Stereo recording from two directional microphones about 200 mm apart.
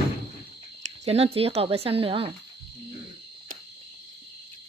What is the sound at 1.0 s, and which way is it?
Speech, 30° right (ahead or behind).